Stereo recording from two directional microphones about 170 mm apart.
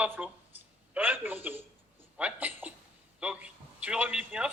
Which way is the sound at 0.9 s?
10° right (ahead or behind).